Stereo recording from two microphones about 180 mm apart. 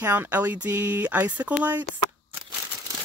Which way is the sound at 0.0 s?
10° right (ahead or behind).